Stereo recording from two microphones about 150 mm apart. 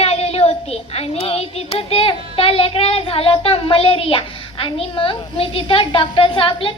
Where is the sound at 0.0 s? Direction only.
45° left (ahead or behind).